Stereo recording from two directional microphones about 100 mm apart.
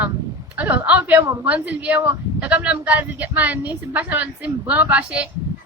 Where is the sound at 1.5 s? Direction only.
15° right (ahead or behind).